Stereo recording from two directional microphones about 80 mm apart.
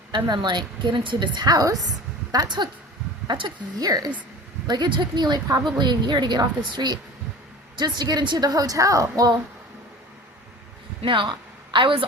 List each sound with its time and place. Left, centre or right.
0.3 s a woman's voice: right
1.5 s a woman's voice: right
2.3 s speech: right
3.2 s speech: right
3.8 s a woman's voice: right
11.0 s a woman's voice: right